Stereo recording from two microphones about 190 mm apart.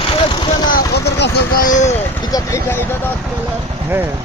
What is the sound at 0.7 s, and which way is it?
Vehicle, 60° left (ahead or behind).